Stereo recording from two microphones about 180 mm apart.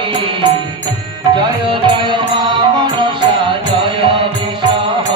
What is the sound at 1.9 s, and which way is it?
Music, 25° right (ahead or behind).